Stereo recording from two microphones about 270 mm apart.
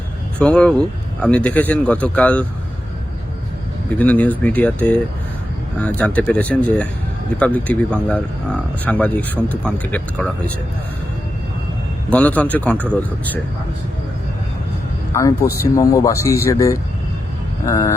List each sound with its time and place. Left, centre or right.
0.3 s speech: centre
3.9 s speech: centre
12.1 s speech: centre
15.7 s speech: centre